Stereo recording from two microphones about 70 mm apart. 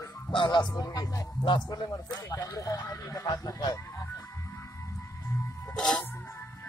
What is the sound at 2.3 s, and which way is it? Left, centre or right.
Speech, left.